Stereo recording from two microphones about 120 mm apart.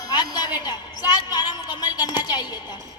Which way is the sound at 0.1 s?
35° left (ahead or behind).